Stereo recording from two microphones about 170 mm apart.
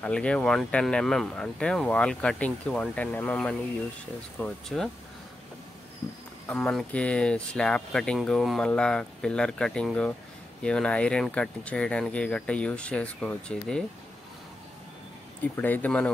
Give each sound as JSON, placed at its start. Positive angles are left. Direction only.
{"t": 0.0, "sound": "speech", "side_deg": 5}
{"t": 6.4, "sound": "speech", "side_deg": 5}
{"t": 15.4, "sound": "speech", "side_deg": 10}